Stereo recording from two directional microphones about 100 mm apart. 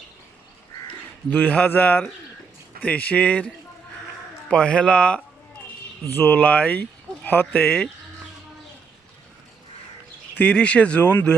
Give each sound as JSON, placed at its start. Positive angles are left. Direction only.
{"t": 1.3, "sound": "speech", "side_deg": 15}
{"t": 10.3, "sound": "speech", "side_deg": 10}